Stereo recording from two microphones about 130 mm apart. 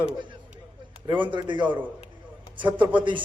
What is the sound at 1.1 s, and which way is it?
Speech, 40° right (ahead or behind).